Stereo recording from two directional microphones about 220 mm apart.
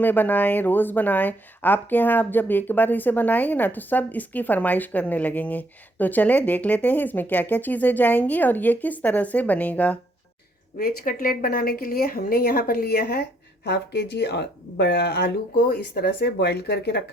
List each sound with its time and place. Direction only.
0.0 s speech: 10° left (ahead or behind)
10.8 s speech: 40° left (ahead or behind)